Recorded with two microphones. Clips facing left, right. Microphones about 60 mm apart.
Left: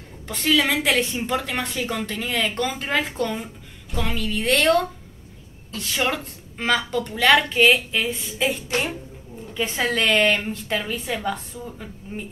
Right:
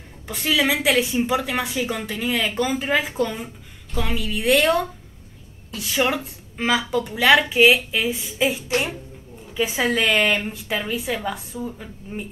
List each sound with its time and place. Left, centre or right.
0.3 s a woman's voice: centre